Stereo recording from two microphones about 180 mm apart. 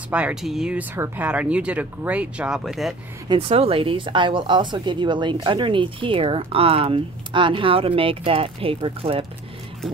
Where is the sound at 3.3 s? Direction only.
30° right (ahead or behind).